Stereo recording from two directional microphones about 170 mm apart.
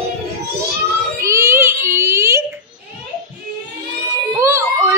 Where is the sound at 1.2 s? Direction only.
15° right (ahead or behind).